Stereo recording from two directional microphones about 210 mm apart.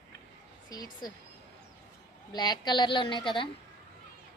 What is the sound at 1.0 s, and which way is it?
Speech, 20° left (ahead or behind).